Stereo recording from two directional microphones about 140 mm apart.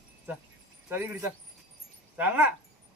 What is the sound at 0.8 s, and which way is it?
Speech, 20° right (ahead or behind).